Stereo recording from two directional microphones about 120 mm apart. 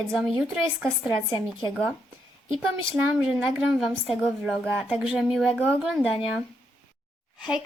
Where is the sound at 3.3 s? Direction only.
5° right (ahead or behind).